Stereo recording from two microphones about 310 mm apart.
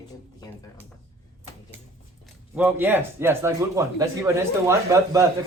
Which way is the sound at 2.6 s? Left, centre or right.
Centre.